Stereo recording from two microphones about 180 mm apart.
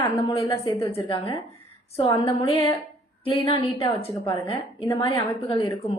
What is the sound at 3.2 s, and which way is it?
Speech, 25° left (ahead or behind).